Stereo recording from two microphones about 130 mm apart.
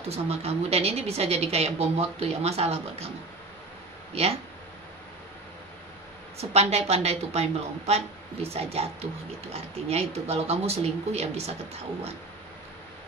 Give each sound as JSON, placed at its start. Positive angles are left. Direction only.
{"t": 0.1, "sound": "speech", "side_deg": -50}
{"t": 4.1, "sound": "speech", "side_deg": -50}
{"t": 6.3, "sound": "speech", "side_deg": -55}